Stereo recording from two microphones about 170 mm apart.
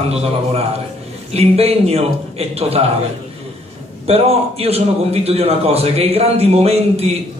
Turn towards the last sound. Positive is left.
turn(degrees=-35)  # may be behind; listen again after turning